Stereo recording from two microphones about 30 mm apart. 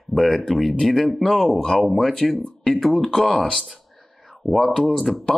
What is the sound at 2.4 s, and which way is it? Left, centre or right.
Speech, centre.